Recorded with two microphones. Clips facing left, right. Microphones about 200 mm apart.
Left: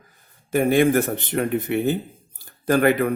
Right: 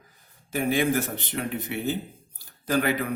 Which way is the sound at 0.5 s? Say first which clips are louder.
Left 7 dB; 55° left (ahead or behind).